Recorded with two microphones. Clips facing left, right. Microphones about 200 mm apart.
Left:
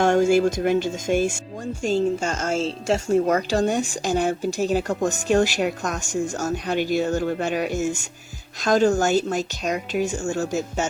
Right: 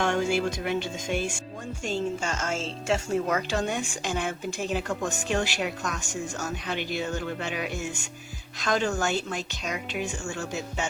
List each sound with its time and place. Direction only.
0.0 s a woman's voice: 45° left (ahead or behind)